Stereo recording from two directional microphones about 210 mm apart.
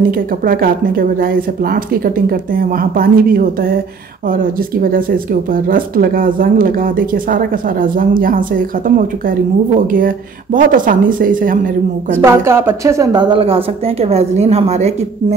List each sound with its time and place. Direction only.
0.1 s speech: 45° right (ahead or behind)
12.2 s a woman's voice: 10° right (ahead or behind); by 15.0 s 30° right (ahead or behind)